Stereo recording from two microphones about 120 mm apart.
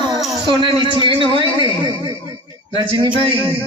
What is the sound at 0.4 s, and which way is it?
A man's voice, 40° right (ahead or behind).